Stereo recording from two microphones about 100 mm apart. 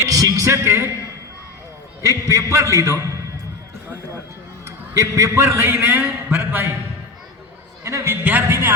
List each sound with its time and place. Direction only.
0.0 s a sound: 35° right (ahead or behind)
2.0 s a man's voice: 30° right (ahead or behind)
4.9 s a man's voice: 30° right (ahead or behind)
7.9 s a man's voice: 25° right (ahead or behind)
8.2 s a man's voice: 15° right (ahead or behind)